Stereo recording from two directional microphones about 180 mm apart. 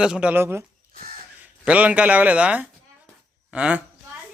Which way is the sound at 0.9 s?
55° right (ahead or behind).